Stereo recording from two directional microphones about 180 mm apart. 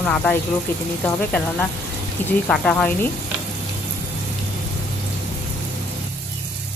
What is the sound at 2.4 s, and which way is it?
Speech, 5° left (ahead or behind).